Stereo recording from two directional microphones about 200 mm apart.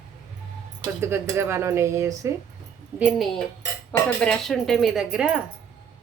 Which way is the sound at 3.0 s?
Centre (ahead or behind).